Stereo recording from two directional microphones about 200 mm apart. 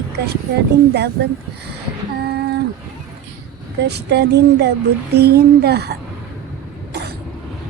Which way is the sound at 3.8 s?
55° right (ahead or behind).